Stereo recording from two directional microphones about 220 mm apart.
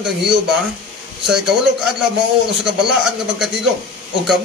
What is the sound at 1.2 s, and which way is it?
Speech, centre (ahead or behind).